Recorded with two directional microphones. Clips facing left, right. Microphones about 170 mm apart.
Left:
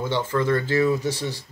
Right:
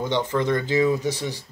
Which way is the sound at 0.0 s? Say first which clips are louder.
Even; 20° right (ahead or behind).